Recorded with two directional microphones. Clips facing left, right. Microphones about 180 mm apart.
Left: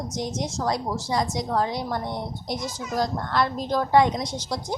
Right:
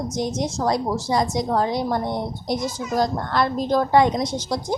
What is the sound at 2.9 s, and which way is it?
A woman's voice, 45° right (ahead or behind).